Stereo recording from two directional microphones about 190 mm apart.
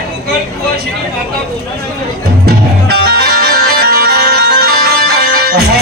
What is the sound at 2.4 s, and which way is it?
Music, 55° right (ahead or behind).